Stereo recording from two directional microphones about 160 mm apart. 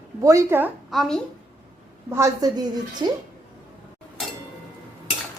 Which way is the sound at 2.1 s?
20° right (ahead or behind).